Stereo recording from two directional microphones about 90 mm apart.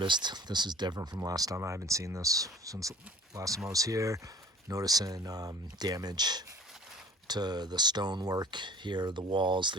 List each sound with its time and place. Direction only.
0.0 s speech: 55° right (ahead or behind)
1.2 s speech: 40° right (ahead or behind)
1.5 s speech: 30° right (ahead or behind); by 9.7 s 60° right (ahead or behind)